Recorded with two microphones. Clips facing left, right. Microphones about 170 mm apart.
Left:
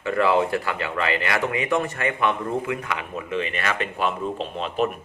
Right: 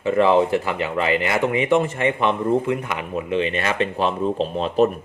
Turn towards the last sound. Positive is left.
turn(degrees=-35)  # may be behind; listen again after turning